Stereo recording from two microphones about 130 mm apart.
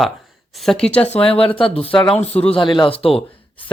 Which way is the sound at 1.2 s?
45° left (ahead or behind).